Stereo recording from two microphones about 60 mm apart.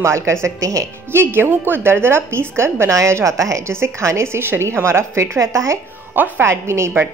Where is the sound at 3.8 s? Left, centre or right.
Right.